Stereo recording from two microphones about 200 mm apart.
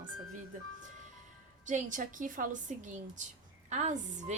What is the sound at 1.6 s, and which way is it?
Speech, 40° right (ahead or behind).